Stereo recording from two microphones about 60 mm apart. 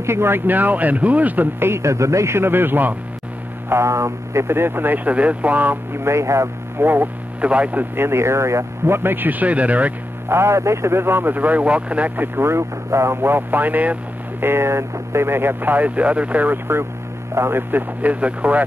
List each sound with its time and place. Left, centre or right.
0.0 s speech: right
0.5 s speech: right
1.7 s speech: right
3.6 s speech: right
6.0 s speech: right
6.8 s speech: right
7.4 s speech: right
7.9 s speech: right
10.2 s speech: right
12.2 s speech: right
14.4 s speech: right
17.3 s speech: right